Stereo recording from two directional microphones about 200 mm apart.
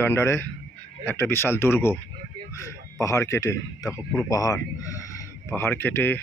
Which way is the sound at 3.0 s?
15° left (ahead or behind).